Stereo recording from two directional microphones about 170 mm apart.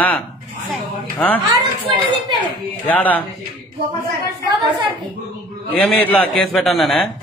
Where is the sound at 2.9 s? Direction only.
10° left (ahead or behind).